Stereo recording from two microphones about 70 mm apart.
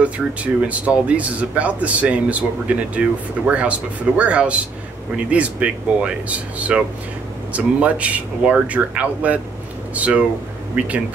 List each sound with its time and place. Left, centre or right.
0.0 s speech: centre